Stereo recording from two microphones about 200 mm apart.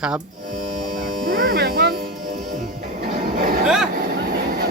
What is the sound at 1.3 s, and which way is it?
Music, 45° right (ahead or behind).